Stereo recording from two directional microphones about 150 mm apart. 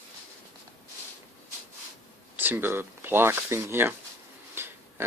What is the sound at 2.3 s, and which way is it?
Speech, 15° right (ahead or behind).